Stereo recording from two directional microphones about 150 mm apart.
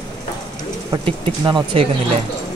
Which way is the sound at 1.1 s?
35° right (ahead or behind).